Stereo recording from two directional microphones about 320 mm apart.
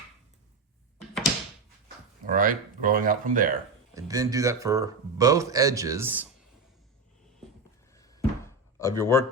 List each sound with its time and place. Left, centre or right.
2.2 s speech: right
3.9 s speech: centre
7.9 s a sound: centre